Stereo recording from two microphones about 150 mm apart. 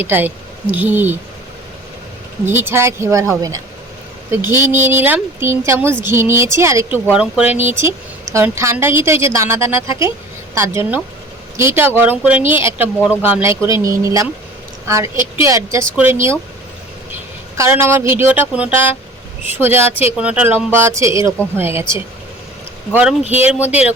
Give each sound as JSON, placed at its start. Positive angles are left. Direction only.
{"t": 0.0, "sound": "speech", "side_deg": -15}
{"t": 2.5, "sound": "speech", "side_deg": -15}
{"t": 7.1, "sound": "speech", "side_deg": -5}
{"t": 17.6, "sound": "speech", "side_deg": -15}
{"t": 23.3, "sound": "speech", "side_deg": -10}